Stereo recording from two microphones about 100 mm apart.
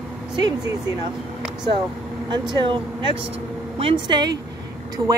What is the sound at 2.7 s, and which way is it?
Speech, 65° right (ahead or behind).